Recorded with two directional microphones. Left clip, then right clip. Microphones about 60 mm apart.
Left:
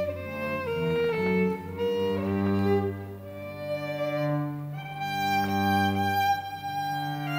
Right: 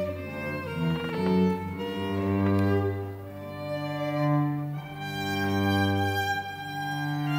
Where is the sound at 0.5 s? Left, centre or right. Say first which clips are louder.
Left 6 dB; left.